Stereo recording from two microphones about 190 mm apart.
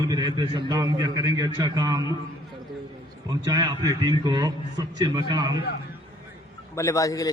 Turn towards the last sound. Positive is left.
turn(degrees=20)  # may be behind; listen again after turning